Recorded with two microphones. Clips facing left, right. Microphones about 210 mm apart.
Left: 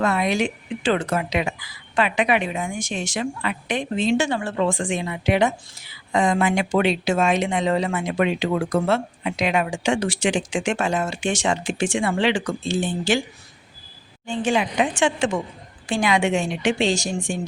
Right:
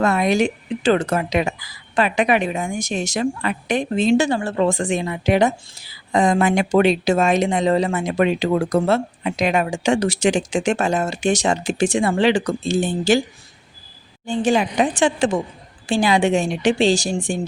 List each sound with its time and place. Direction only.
0.0 s a woman's voice: 45° right (ahead or behind)
14.4 s a woman's voice: 40° right (ahead or behind)